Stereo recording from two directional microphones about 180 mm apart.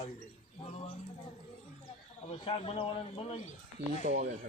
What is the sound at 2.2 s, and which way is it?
Speech, 30° left (ahead or behind).